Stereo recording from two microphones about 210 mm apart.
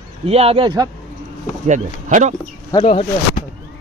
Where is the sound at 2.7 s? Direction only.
25° left (ahead or behind).